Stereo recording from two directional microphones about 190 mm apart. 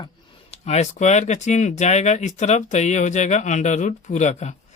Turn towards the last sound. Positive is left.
turn(degrees=35)  # may be behind; listen again after turning